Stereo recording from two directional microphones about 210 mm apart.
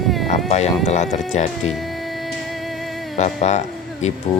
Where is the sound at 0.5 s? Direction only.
30° left (ahead or behind).